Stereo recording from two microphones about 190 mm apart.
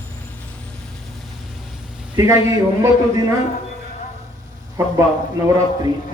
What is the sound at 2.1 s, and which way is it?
Speech, 15° right (ahead or behind).